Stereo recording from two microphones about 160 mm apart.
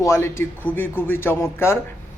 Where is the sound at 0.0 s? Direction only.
15° left (ahead or behind).